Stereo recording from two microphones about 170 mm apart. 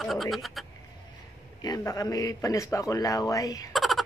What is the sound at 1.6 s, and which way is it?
Speech, 20° left (ahead or behind).